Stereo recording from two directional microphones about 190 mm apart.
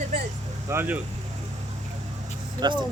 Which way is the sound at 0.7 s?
10° right (ahead or behind).